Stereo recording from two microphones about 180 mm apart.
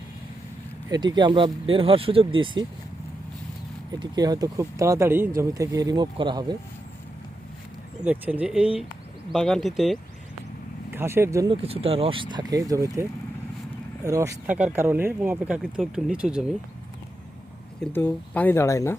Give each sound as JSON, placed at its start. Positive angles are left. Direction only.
{"t": 0.9, "sound": "speech", "side_deg": -25}
{"t": 4.0, "sound": "speech", "side_deg": -20}
{"t": 8.0, "sound": "speech", "side_deg": -10}
{"t": 10.9, "sound": "speech", "side_deg": -15}
{"t": 11.5, "sound": "speech", "side_deg": -30}
{"t": 17.9, "sound": "speech", "side_deg": 10}